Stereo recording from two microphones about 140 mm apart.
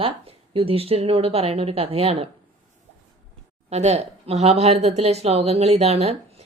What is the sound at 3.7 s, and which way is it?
Speech, 50° right (ahead or behind).